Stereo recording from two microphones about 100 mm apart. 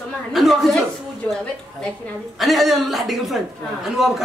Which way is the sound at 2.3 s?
Centre (ahead or behind).